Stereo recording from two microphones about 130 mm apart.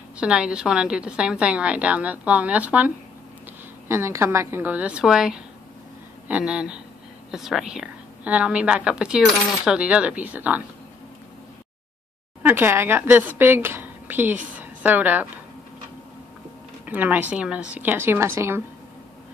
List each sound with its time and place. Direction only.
0.2 s a woman's voice: 5° right (ahead or behind)
3.9 s a woman's voice: 20° right (ahead or behind)
12.4 s a woman's voice: 15° right (ahead or behind)
16.8 s a woman's voice: 15° right (ahead or behind)